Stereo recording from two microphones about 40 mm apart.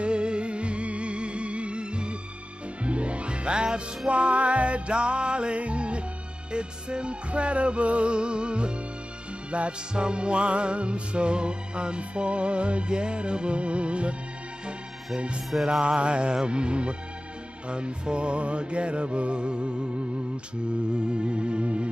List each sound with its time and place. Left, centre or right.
0.0 s music: right
15.8 s music: right